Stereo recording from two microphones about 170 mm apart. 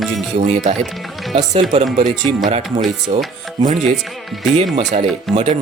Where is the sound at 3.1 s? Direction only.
35° right (ahead or behind).